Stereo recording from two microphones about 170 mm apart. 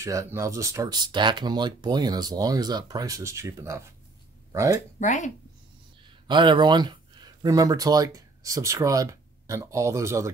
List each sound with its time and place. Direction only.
0.0 s speech: 15° right (ahead or behind)
5.0 s speech: 45° left (ahead or behind)
6.0 s speech: 25° right (ahead or behind)